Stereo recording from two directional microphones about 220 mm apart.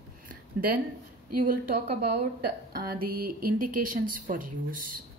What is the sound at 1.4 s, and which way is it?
Speech, 40° right (ahead or behind).